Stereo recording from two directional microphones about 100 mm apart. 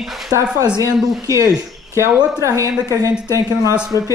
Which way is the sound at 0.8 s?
35° right (ahead or behind).